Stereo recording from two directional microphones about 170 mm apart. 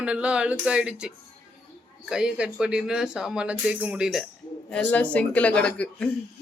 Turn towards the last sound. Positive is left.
turn(degrees=5)  # may be behind; listen again after turning